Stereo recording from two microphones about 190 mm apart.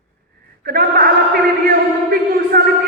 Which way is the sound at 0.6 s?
50° right (ahead or behind).